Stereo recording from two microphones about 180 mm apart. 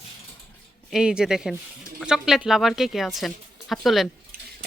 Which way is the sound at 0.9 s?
5° right (ahead or behind).